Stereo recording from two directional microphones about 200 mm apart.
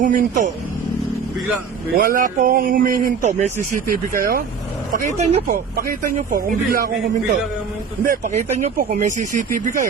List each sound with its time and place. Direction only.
0.0 s speech: 40° right (ahead or behind)
2.0 s speech: 45° right (ahead or behind)
5.5 s speech: 45° right (ahead or behind)
8.0 s speech: 40° right (ahead or behind)